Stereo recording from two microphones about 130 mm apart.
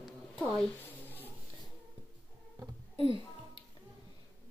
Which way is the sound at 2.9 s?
45° right (ahead or behind).